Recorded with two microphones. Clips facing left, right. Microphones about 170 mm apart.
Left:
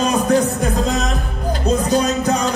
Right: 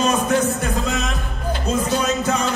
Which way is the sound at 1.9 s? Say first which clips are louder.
Left 4 dB; 40° left (ahead or behind).